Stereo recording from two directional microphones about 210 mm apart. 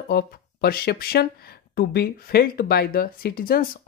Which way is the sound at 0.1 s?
50° left (ahead or behind).